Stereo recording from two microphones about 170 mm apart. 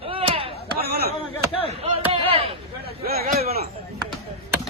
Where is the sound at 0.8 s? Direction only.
70° right (ahead or behind).